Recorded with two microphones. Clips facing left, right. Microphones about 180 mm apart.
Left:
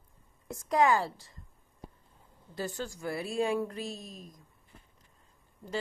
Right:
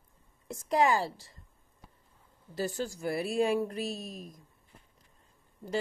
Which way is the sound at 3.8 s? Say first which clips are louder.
Right 3 dB; 10° right (ahead or behind).